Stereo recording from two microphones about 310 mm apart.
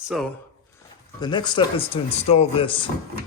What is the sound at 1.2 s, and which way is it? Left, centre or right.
Speech, centre.